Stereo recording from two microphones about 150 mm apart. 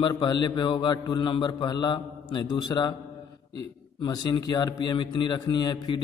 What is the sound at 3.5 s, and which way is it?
A man's voice, 30° left (ahead or behind).